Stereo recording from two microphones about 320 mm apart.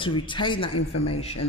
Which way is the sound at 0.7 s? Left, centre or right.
Left.